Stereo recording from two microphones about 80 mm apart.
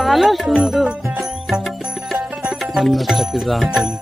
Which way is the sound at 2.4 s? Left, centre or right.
Centre.